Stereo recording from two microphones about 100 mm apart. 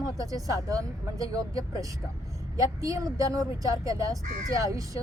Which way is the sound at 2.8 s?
35° right (ahead or behind).